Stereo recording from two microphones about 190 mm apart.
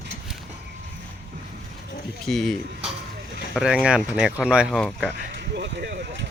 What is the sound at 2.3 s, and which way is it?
Speech, centre (ahead or behind).